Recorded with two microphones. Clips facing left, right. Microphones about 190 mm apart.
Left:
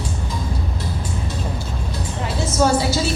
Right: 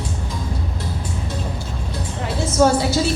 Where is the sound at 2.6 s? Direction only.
55° right (ahead or behind).